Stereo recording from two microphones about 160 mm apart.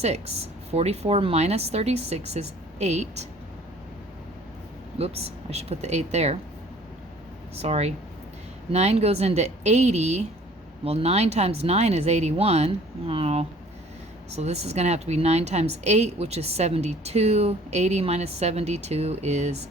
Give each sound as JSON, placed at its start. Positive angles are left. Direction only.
{"t": 0.7, "sound": "speech", "side_deg": -40}
{"t": 4.9, "sound": "speech", "side_deg": -40}
{"t": 7.6, "sound": "a woman's voice", "side_deg": -40}